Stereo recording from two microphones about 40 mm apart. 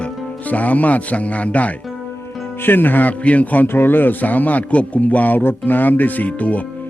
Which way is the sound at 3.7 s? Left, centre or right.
Left.